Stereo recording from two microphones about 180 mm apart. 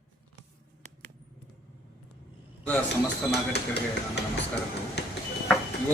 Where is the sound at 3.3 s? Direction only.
70° left (ahead or behind).